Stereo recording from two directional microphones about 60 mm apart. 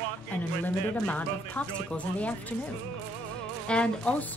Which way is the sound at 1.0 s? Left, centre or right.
Left.